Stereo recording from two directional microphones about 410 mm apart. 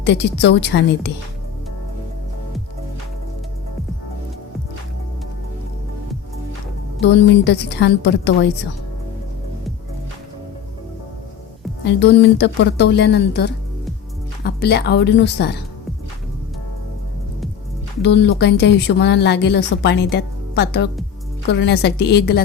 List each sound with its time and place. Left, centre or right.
0.0 s speech: left
7.0 s speech: left
11.9 s speech: left
18.0 s speech: left